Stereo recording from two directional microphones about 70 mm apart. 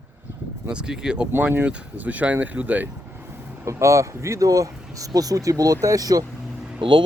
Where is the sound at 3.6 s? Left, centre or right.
Right.